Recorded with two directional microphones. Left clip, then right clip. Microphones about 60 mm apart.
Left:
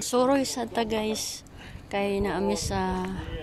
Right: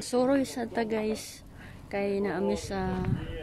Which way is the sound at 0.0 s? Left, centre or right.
Centre.